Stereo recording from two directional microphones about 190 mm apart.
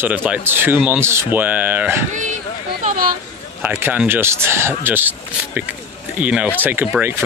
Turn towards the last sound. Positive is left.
turn(degrees=-10)  # may be behind; listen again after turning